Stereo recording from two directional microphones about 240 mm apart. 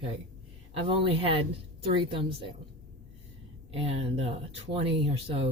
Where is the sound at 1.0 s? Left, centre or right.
Right.